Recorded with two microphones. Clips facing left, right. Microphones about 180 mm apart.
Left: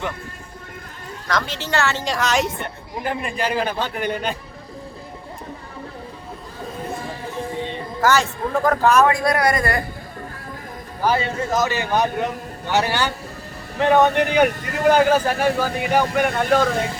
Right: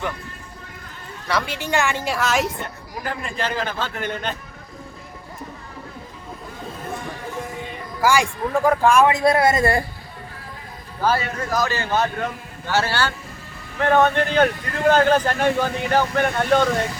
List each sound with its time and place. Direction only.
1.3 s a woman's voice: 10° right (ahead or behind)
2.6 s a man's voice: 25° left (ahead or behind)
7.5 s music: 30° left (ahead or behind)
8.0 s a woman's voice: 10° right (ahead or behind)
9.1 s a man's voice: 25° right (ahead or behind)
11.2 s a man's voice: 25° left (ahead or behind)